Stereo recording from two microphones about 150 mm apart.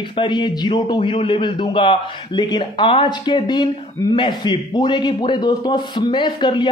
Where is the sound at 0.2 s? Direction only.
30° left (ahead or behind).